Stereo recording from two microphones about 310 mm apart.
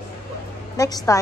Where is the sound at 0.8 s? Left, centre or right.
Centre.